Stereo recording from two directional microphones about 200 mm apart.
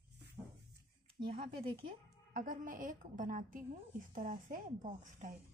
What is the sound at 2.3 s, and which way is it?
A woman's voice, 40° right (ahead or behind).